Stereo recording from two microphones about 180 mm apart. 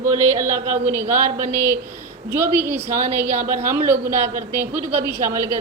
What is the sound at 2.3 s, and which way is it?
A woman's voice, 15° right (ahead or behind).